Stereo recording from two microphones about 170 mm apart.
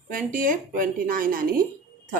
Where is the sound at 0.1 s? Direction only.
50° right (ahead or behind).